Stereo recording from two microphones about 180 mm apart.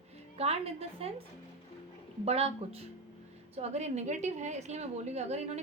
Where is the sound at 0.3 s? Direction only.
35° right (ahead or behind).